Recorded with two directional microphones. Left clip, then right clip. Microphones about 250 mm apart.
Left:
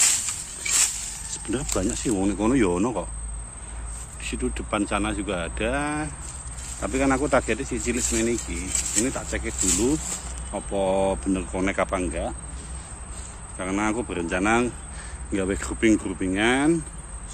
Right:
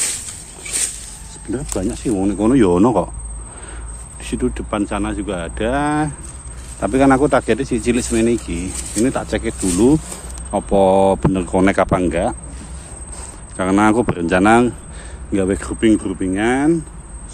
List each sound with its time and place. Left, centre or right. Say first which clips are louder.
1.5 s speech: right 4 dB; centre; by 3.1 s right
4.2 s speech: right 8 dB; right
13.6 s speech: right 11 dB; right; by 16.8 s centre